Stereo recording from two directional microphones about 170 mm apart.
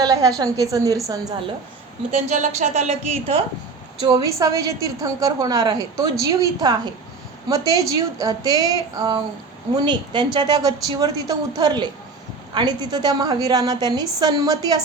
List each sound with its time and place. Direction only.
0.0 s a woman's voice: 20° right (ahead or behind)
2.1 s a woman's voice: 45° right (ahead or behind)
4.1 s a woman's voice: 20° right (ahead or behind)